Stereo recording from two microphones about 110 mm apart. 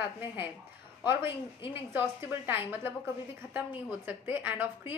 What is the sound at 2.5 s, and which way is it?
Speech, 20° right (ahead or behind).